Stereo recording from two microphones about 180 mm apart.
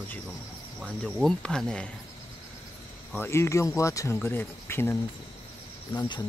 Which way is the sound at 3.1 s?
15° left (ahead or behind).